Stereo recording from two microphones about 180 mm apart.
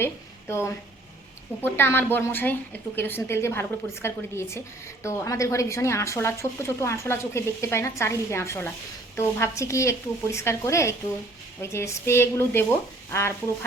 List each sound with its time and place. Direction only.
0.0 s a woman's voice: 15° left (ahead or behind)